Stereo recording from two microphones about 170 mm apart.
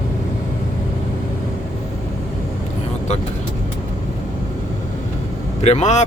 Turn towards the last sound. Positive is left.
turn(degrees=40)  # may be behind; listen again after turning